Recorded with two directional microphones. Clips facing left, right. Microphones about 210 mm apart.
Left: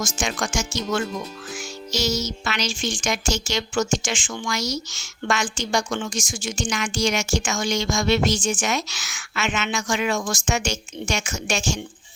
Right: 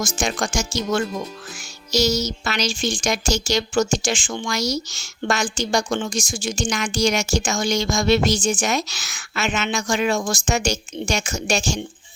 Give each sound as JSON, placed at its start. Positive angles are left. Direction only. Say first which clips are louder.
{"t": 0.0, "sound": "speech", "louder": "right 3 dB", "side_deg": -35}